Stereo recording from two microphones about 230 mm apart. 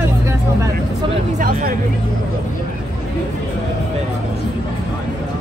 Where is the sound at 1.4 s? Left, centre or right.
Right.